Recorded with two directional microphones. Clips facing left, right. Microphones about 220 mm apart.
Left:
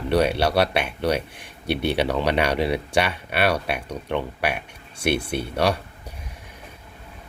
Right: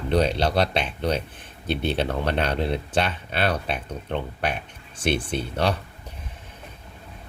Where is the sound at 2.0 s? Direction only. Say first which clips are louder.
Left 3 dB; 75° left (ahead or behind).